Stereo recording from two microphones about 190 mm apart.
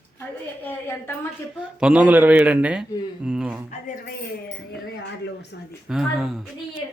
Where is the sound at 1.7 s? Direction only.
5° right (ahead or behind).